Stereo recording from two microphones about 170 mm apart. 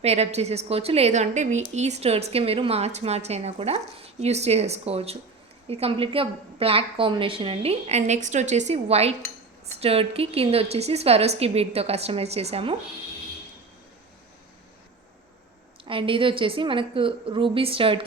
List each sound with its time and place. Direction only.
0.0 s a woman's voice: 40° right (ahead or behind)
15.8 s a woman's voice: 30° right (ahead or behind)